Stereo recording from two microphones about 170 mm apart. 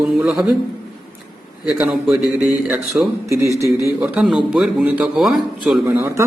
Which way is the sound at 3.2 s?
15° right (ahead or behind).